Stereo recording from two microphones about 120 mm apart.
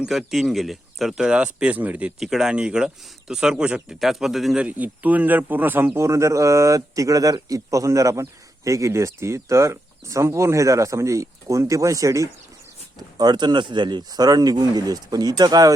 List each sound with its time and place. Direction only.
0.0 s speech: 5° right (ahead or behind)
4.6 s a man's voice: 15° right (ahead or behind); by 15.7 s 35° right (ahead or behind)